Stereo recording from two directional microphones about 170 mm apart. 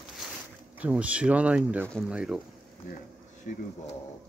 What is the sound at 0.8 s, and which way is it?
Speech, 10° right (ahead or behind).